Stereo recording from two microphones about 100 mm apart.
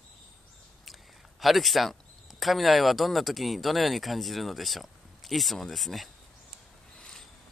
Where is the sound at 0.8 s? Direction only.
Centre (ahead or behind).